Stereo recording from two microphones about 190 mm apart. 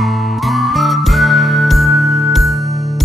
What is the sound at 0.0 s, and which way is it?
Music, centre (ahead or behind).